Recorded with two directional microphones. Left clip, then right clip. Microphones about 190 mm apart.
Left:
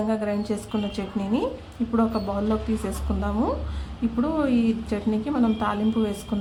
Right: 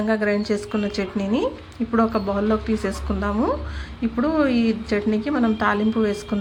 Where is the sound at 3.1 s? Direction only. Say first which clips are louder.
Right 3 dB; 5° right (ahead or behind).